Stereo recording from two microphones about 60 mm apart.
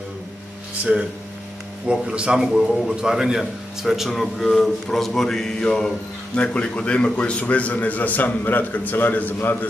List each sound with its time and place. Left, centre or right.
1.9 s speech: centre
2.4 s a man's voice: centre; by 9.7 s left